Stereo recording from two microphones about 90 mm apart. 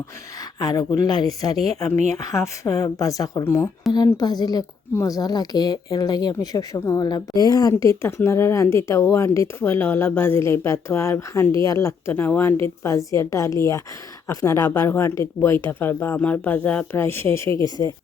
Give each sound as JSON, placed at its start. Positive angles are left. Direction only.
{"t": 0.6, "sound": "speech", "side_deg": 40}
{"t": 3.4, "sound": "speech", "side_deg": 25}
{"t": 3.9, "sound": "speech", "side_deg": 50}
{"t": 12.1, "sound": "speech", "side_deg": 25}